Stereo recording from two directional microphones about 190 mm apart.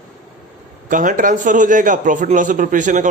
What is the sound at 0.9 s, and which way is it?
A man's voice, 45° right (ahead or behind).